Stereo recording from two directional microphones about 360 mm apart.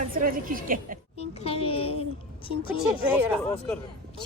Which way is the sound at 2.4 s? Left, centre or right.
Centre.